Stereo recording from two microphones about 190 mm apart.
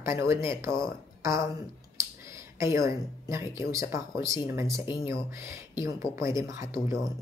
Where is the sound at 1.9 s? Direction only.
15° right (ahead or behind).